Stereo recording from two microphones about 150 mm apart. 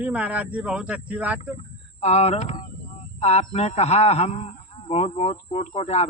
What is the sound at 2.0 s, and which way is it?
A man's voice, 45° left (ahead or behind).